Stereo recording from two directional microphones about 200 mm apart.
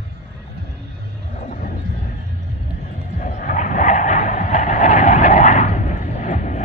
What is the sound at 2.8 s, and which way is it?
Vehicle, 40° left (ahead or behind).